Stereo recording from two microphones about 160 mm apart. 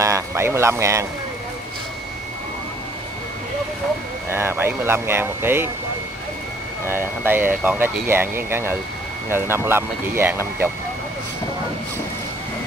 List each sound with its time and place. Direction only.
0.0 s speech: 15° right (ahead or behind)
4.3 s speech: 15° right (ahead or behind)
6.9 s speech: 15° right (ahead or behind)